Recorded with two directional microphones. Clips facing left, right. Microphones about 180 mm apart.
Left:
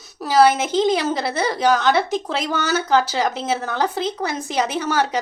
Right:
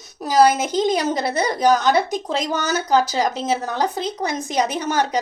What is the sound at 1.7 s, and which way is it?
A woman's voice, 45° right (ahead or behind).